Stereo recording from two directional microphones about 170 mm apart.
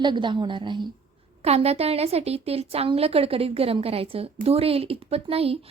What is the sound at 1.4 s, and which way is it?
A woman's voice, 35° right (ahead or behind).